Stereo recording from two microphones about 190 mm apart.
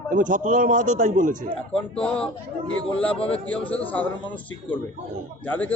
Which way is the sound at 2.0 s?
5° left (ahead or behind).